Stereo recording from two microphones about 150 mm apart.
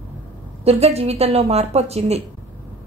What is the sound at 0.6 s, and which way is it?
A woman's voice, 45° right (ahead or behind).